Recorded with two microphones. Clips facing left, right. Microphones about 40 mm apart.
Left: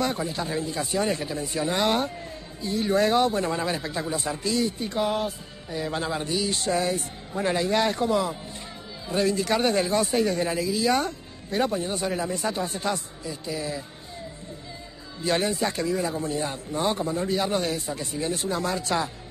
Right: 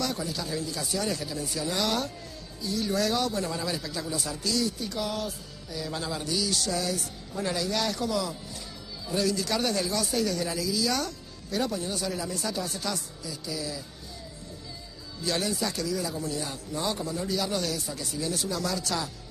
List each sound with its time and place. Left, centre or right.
0.0 s speech: left
15.2 s speech: left